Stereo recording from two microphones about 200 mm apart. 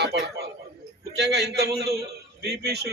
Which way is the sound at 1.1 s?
55° right (ahead or behind).